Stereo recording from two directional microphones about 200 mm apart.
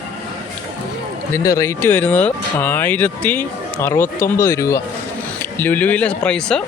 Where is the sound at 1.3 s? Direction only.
15° left (ahead or behind).